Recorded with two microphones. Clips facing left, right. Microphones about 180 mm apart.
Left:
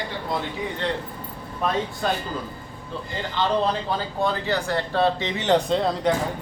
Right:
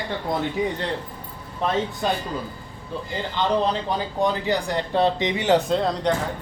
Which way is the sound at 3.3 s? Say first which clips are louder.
Right 1 dB; 15° right (ahead or behind).